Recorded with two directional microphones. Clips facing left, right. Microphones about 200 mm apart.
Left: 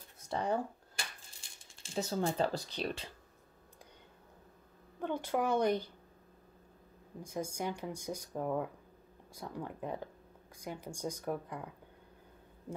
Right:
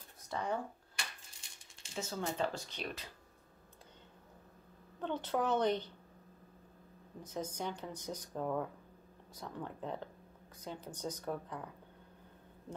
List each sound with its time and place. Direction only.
0.3 s a sound: 30° left (ahead or behind)
2.0 s speech: 35° left (ahead or behind)
5.0 s speech: 10° left (ahead or behind)
7.2 s speech: 10° left (ahead or behind)